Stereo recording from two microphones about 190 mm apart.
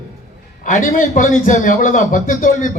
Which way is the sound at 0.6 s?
45° left (ahead or behind).